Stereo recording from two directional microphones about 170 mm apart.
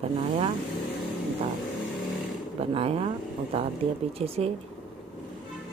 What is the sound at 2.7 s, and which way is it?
Speech, 35° right (ahead or behind).